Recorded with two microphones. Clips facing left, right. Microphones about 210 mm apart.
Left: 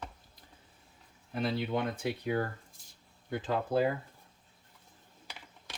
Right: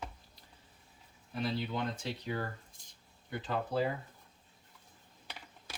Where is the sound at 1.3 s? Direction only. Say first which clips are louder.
Left 4 dB; 55° left (ahead or behind).